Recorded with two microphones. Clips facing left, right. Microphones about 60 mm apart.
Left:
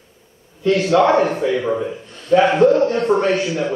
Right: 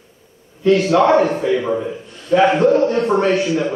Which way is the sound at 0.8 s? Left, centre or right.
Centre.